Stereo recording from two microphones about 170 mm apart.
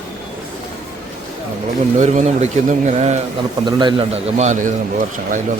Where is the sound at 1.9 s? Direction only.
45° right (ahead or behind).